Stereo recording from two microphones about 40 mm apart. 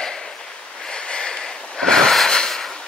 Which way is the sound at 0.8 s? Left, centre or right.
Centre.